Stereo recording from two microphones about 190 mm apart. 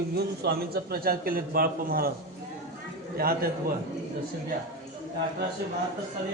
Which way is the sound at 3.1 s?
50° right (ahead or behind).